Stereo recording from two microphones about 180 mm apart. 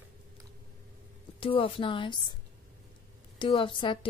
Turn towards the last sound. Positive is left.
turn(degrees=25)  # may be behind; listen again after turning